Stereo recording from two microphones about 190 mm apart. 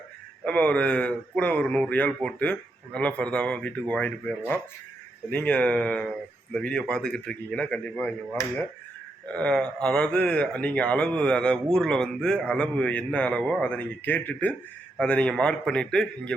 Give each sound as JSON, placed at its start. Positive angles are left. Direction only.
{"t": 0.4, "sound": "speech", "side_deg": 5}